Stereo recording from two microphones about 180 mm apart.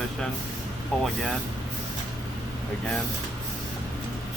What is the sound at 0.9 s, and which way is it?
Speech, centre (ahead or behind).